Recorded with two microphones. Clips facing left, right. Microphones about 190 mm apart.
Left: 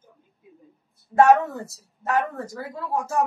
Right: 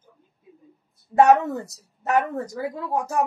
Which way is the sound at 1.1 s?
20° right (ahead or behind).